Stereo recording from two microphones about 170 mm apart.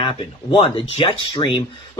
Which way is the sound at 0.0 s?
30° left (ahead or behind).